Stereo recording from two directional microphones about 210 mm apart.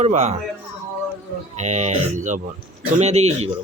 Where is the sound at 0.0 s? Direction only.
35° right (ahead or behind).